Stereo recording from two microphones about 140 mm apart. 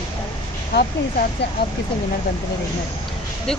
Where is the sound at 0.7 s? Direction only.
90° left.